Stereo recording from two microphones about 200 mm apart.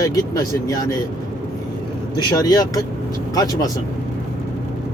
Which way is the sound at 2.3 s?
20° left (ahead or behind).